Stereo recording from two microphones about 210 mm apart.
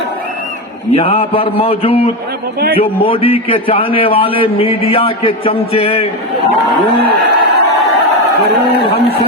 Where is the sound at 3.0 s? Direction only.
25° left (ahead or behind).